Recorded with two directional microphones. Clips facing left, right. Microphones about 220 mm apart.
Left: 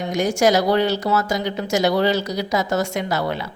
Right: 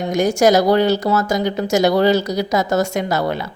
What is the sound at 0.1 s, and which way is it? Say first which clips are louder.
A woman's voice: right 4 dB; 45° right (ahead or behind).